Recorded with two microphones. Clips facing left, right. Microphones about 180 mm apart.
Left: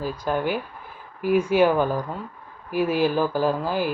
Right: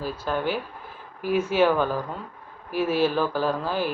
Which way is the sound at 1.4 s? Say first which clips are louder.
Left 1 dB; 10° left (ahead or behind).